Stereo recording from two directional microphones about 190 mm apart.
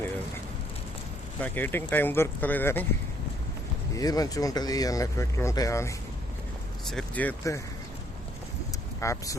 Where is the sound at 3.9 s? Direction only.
20° left (ahead or behind).